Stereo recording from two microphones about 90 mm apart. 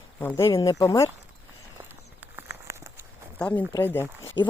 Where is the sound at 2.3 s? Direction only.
25° right (ahead or behind).